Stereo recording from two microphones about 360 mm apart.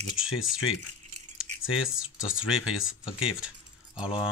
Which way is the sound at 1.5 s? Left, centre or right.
Centre.